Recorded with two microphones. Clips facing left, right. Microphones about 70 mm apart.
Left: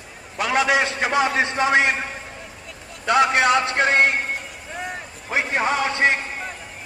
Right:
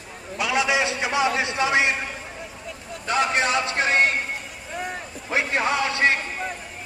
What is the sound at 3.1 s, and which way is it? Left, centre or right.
A man's voice, left.